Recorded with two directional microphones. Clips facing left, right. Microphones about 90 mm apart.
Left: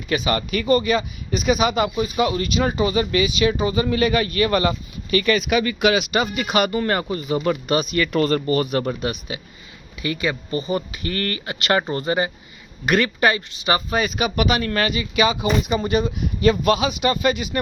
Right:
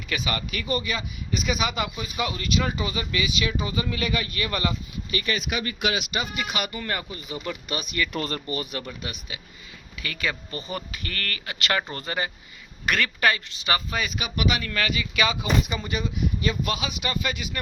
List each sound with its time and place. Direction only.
0.1 s speech: 40° left (ahead or behind)
1.3 s speech: 30° left (ahead or behind)
5.1 s speech: 65° left (ahead or behind); by 6.1 s 90° left
6.1 s speech: 50° left (ahead or behind)
7.9 s speech: 60° left (ahead or behind); by 9.4 s 40° left (ahead or behind)
10.0 s speech: 20° left (ahead or behind)
14.2 s speech: 45° left (ahead or behind)
16.4 s speech: 50° left (ahead or behind)
17.0 s speech: 30° left (ahead or behind)